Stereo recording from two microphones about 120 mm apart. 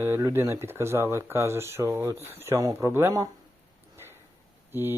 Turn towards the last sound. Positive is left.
turn(degrees=-20)  # may be behind; listen again after turning